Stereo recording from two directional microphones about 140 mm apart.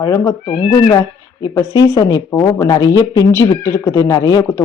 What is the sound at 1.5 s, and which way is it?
Speech, 25° left (ahead or behind).